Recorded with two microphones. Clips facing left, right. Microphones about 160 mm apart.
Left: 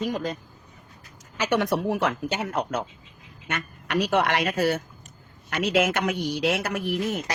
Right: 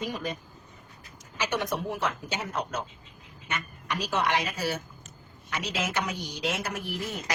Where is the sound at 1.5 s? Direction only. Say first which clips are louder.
Left 8 dB; 70° left (ahead or behind).